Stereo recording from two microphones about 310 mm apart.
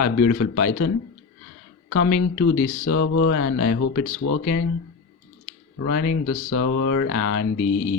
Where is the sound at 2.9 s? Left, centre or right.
Left.